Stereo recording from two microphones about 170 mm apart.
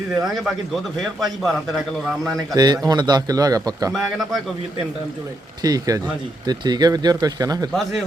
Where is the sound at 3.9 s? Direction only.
Centre (ahead or behind).